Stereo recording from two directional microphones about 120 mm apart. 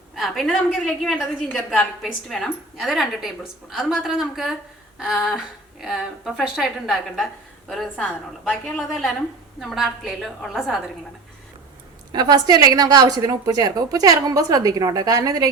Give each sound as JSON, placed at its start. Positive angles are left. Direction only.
{"t": 0.2, "sound": "a woman's voice", "side_deg": 0}
{"t": 12.1, "sound": "a woman's voice", "side_deg": -35}